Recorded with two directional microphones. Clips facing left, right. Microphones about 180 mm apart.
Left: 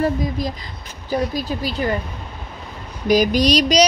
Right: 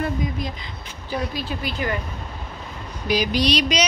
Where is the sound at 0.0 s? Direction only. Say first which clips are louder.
Left 5 dB; 35° left (ahead or behind).